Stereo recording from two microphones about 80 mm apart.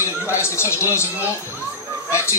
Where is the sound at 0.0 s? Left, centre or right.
Left.